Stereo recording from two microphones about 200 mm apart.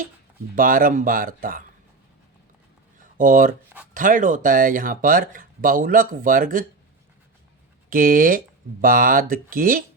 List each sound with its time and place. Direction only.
0.5 s speech: 45° right (ahead or behind)
3.0 s a sound: 40° right (ahead or behind)
3.9 s speech: 40° right (ahead or behind)
7.9 s speech: 45° right (ahead or behind)